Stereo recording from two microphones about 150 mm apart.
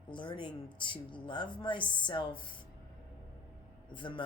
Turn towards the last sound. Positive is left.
turn(degrees=35)  # may be behind; listen again after turning